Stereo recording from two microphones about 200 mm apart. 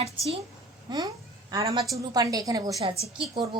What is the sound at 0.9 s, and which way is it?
A woman's voice, 20° right (ahead or behind).